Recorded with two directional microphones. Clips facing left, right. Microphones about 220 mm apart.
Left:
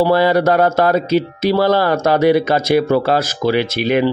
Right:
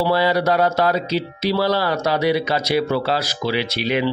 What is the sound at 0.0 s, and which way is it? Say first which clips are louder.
Speech: left 5 dB; 50° left (ahead or behind).